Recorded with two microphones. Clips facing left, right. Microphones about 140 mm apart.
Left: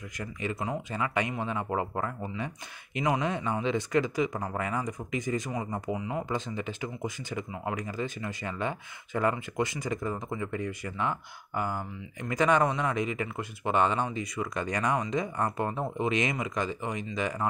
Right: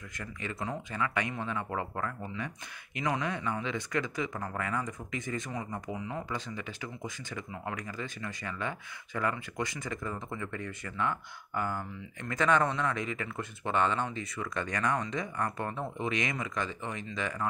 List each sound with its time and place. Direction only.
0.2 s speech: 20° left (ahead or behind)